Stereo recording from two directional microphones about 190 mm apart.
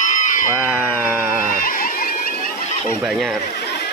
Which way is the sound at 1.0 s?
5° right (ahead or behind).